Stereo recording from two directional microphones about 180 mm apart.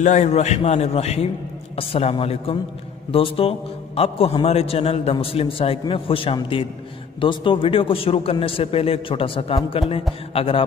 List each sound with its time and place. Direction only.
0.0 s a man's voice: 40° left (ahead or behind)